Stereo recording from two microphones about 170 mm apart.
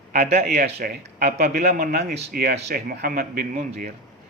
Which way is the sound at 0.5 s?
65° right (ahead or behind).